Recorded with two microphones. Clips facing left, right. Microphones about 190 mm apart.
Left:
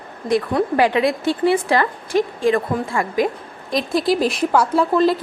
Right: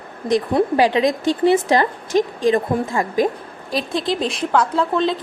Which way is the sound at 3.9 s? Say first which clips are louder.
Left 5 dB; 5° left (ahead or behind).